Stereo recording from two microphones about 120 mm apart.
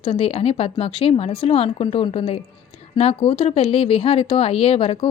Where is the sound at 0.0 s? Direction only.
50° left (ahead or behind).